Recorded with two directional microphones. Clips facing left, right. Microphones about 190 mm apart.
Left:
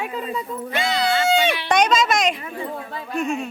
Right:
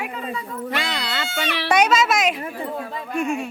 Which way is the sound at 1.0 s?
65° right (ahead or behind).